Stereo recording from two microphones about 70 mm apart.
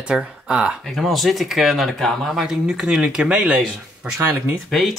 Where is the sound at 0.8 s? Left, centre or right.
Centre.